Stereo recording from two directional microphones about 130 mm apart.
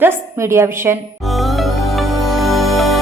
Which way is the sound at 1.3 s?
Centre (ahead or behind).